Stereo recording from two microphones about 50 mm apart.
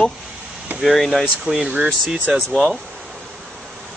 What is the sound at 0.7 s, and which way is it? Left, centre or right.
Speech, centre.